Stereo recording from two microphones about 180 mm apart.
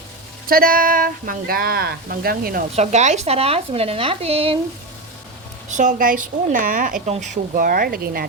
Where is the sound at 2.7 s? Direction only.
40° right (ahead or behind).